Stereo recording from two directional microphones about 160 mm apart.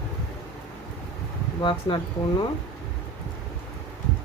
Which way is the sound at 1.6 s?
30° left (ahead or behind).